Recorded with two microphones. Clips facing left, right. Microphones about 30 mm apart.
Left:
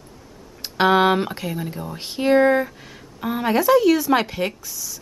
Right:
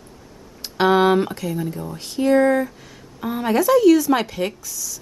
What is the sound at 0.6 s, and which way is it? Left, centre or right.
Speech, centre.